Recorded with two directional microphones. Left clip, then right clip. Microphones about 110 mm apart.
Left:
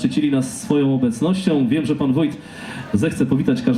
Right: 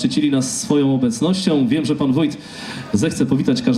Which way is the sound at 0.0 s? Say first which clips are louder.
Right 1 dB; 25° right (ahead or behind).